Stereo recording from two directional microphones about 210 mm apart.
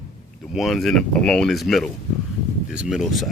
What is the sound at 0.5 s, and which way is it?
Speech, centre (ahead or behind).